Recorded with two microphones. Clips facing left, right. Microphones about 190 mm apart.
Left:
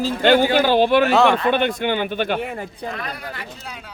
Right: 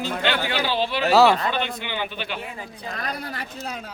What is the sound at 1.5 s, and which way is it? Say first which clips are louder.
Speech: left 8 dB; 55° left (ahead or behind).